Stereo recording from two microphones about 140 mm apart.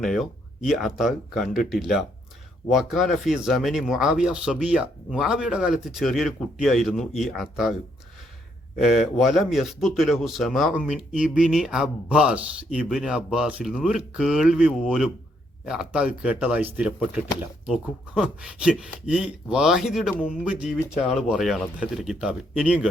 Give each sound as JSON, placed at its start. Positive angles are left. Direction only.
{"t": 0.0, "sound": "speech", "side_deg": 0}
{"t": 8.8, "sound": "speech", "side_deg": 0}